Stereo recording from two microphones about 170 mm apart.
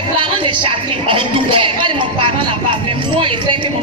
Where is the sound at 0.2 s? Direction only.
30° right (ahead or behind).